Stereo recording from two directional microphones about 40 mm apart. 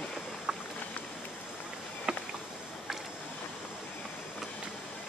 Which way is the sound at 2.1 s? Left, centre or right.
Right.